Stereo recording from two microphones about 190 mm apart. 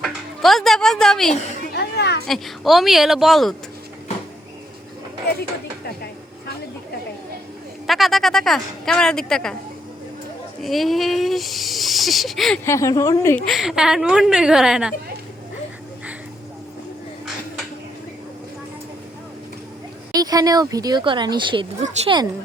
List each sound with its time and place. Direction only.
0.0 s a sound: centre (ahead or behind)
1.7 s children playing: 60° left (ahead or behind)
2.2 s speech: centre (ahead or behind)
7.9 s speech: centre (ahead or behind)
10.6 s speech: centre (ahead or behind)
12.6 s a woman's voice: 15° left (ahead or behind)
13.4 s speech: centre (ahead or behind)
20.1 s speech: 20° right (ahead or behind)